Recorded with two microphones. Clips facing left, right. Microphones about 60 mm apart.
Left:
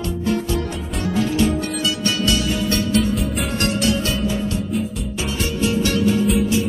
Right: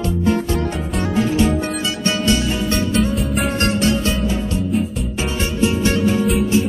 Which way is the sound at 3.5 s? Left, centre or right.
Right.